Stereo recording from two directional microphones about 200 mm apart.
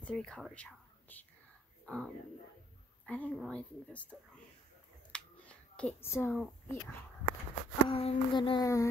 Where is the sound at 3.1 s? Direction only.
5° left (ahead or behind).